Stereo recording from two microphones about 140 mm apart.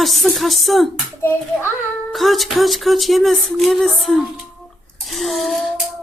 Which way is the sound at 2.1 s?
Centre (ahead or behind).